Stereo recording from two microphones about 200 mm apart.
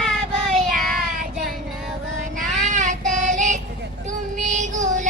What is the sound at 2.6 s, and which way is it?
Child singing, 40° right (ahead or behind).